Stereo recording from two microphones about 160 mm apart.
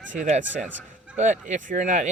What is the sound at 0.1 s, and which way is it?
Speech, 50° right (ahead or behind).